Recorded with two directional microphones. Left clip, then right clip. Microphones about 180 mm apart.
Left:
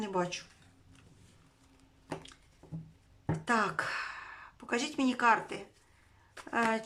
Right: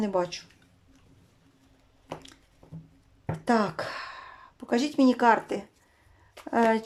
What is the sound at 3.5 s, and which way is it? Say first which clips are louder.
Speech: right 4 dB; 30° right (ahead or behind).